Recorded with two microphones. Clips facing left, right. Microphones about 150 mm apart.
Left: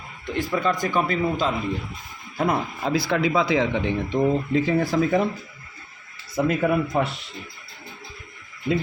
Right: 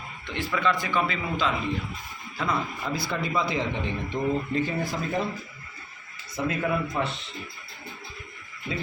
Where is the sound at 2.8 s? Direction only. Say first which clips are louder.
Left 7 dB; 80° left.